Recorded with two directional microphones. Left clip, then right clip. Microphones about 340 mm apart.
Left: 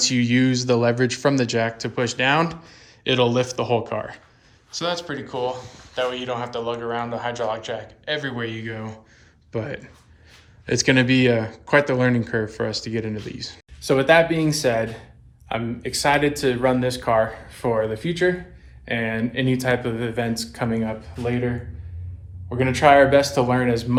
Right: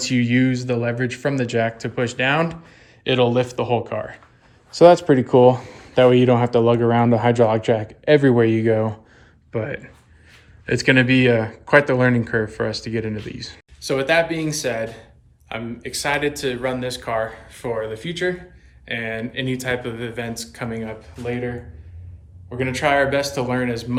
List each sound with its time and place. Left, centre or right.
0.0 s speech: centre
4.7 s speech: centre
9.5 s speech: centre